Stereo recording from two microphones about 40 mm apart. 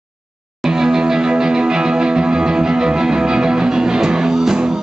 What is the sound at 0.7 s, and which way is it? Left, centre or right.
Music, centre.